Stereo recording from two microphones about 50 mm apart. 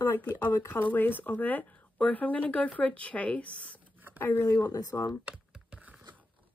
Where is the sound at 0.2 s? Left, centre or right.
Left.